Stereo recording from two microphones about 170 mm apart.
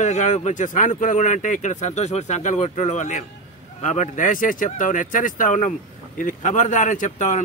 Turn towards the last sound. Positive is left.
turn(degrees=45)  # may be behind; listen again after turning